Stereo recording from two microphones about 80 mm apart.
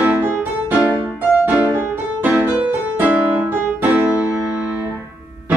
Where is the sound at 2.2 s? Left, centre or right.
Centre.